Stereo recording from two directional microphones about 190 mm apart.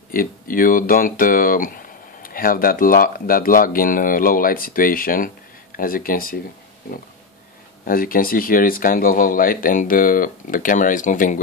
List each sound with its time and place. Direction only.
0.1 s speech: 45° left (ahead or behind)
7.8 s speech: 50° left (ahead or behind)